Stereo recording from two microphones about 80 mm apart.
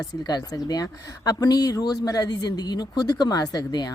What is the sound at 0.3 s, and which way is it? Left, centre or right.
Speech, left.